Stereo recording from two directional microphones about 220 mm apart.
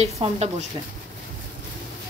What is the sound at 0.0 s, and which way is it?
Speech, 30° right (ahead or behind).